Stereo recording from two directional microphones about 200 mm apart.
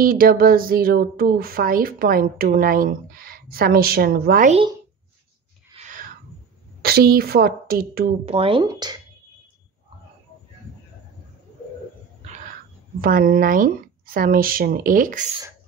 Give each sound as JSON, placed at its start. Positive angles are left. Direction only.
{"t": 0.0, "sound": "a woman's voice", "side_deg": -45}
{"t": 5.8, "sound": "a sound", "side_deg": -40}
{"t": 6.8, "sound": "a woman's voice", "side_deg": -50}
{"t": 8.3, "sound": "speech", "side_deg": -25}
{"t": 13.0, "sound": "a woman's voice", "side_deg": -45}